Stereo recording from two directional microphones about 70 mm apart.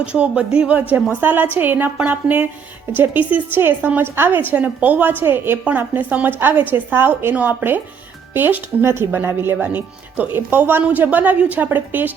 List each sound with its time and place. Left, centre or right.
0.0 s a woman's voice: centre